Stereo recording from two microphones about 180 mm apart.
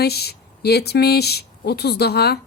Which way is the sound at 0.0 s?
60° left (ahead or behind).